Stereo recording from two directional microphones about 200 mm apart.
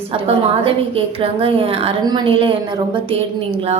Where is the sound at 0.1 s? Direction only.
25° right (ahead or behind).